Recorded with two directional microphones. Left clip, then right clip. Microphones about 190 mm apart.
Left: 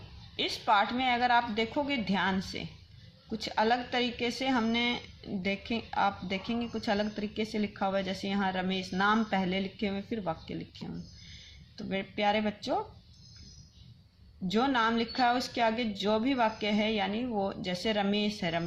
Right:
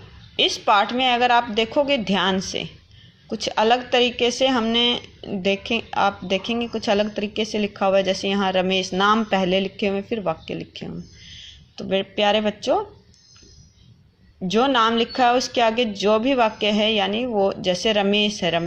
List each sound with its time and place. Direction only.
0.6 s speech: 30° right (ahead or behind)
14.4 s speech: 25° right (ahead or behind)